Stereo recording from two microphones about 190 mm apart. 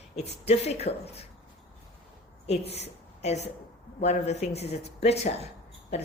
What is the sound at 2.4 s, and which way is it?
A woman's voice, 35° left (ahead or behind).